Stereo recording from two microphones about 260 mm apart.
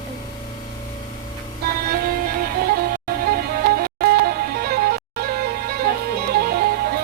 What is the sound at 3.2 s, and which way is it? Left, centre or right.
Music, right.